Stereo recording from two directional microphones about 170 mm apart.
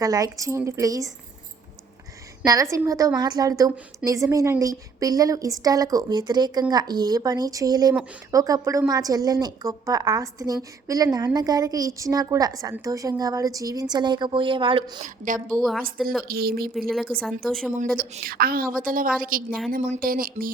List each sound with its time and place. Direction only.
0.0 s a woman's voice: 20° right (ahead or behind)
2.4 s a woman's voice: 20° right (ahead or behind)
15.0 s a woman's voice: 50° right (ahead or behind)
16.2 s a woman's voice: 60° right (ahead or behind)
16.9 s speech: centre (ahead or behind)
17.9 s a woman's voice: 60° right (ahead or behind)